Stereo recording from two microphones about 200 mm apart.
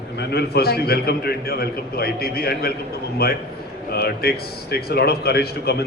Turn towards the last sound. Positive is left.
turn(degrees=55)  # may be behind; listen again after turning